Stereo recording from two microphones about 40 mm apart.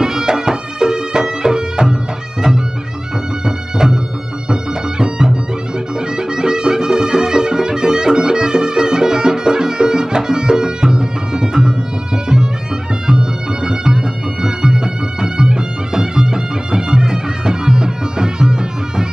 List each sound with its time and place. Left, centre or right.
0.0 s music: centre
3.4 s music: centre
13.0 s music: centre